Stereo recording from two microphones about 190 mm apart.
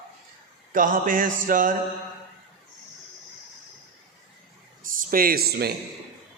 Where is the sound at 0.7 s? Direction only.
45° right (ahead or behind).